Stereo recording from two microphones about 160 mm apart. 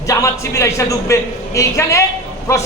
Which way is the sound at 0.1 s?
20° left (ahead or behind).